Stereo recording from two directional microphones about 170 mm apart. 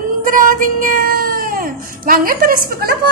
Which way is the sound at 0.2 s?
55° right (ahead or behind).